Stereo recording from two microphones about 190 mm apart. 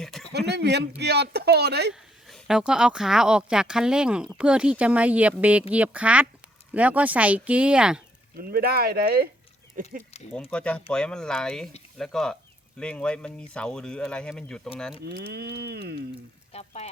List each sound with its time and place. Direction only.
0.0 s a sound: centre (ahead or behind)
0.3 s speech: 60° right (ahead or behind)
1.9 s a woman's voice: centre (ahead or behind)
8.4 s speech: 50° right (ahead or behind)
10.5 s speech: 5° left (ahead or behind)
15.3 s speech: 60° right (ahead or behind)
16.5 s speech: 35° left (ahead or behind)